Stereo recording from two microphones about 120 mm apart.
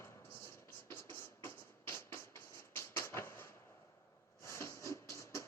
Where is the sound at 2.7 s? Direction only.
20° left (ahead or behind).